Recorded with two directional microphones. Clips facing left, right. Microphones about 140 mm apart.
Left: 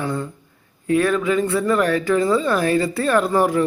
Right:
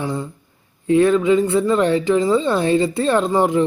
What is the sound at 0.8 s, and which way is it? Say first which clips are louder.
Speech: right 4 dB; 25° right (ahead or behind).